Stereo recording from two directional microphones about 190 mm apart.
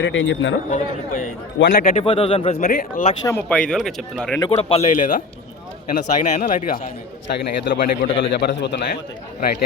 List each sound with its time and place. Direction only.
0.0 s speech: 80° left
0.7 s a man's voice: 45° left (ahead or behind)
2.0 s speech: 30° left (ahead or behind)
2.6 s a man's voice: 45° left (ahead or behind)
3.2 s speech: 10° left (ahead or behind)
4.4 s a man's voice: 30° left (ahead or behind); by 7.9 s 55° left (ahead or behind)
8.0 s a man's voice: 65° left (ahead or behind)